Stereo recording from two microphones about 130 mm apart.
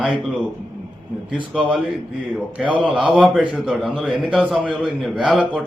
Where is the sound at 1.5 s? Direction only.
5° right (ahead or behind).